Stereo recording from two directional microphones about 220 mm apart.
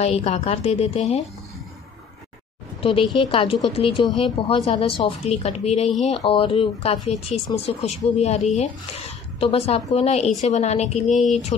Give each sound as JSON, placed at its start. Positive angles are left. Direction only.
{"t": 0.0, "sound": "a woman's voice", "side_deg": 30}
{"t": 2.8, "sound": "a woman's voice", "side_deg": 25}
{"t": 11.1, "sound": "speech", "side_deg": 0}